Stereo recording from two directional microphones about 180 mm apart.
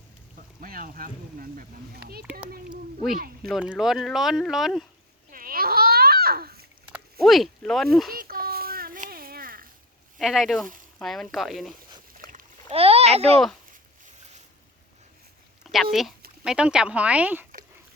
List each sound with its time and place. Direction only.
0.6 s speech: 50° right (ahead or behind)
2.6 s speech: centre (ahead or behind)
3.2 s speech: 55° right (ahead or behind)
3.5 s speech: 5° right (ahead or behind)
5.3 s babbling: 50° right (ahead or behind)
6.9 s speech: centre (ahead or behind)
8.1 s a sound: 55° right (ahead or behind)
10.2 s speech: centre (ahead or behind)
12.1 s a sound: 50° right (ahead or behind)
12.7 s a child's voice: 35° right (ahead or behind)
15.6 s speech: centre (ahead or behind)